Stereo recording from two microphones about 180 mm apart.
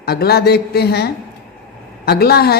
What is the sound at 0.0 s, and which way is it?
A woman's voice, 60° left (ahead or behind).